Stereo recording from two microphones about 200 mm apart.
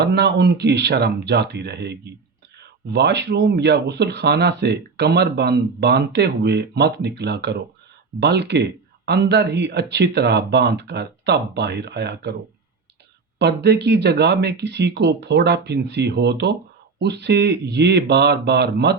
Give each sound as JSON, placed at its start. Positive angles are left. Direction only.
{"t": 0.0, "sound": "speech", "side_deg": -55}
{"t": 13.4, "sound": "speech", "side_deg": -55}